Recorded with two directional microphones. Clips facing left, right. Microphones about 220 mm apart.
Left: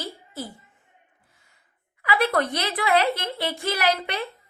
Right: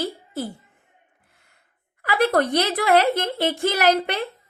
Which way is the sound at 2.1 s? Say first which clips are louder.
Right 4 dB; 45° right (ahead or behind).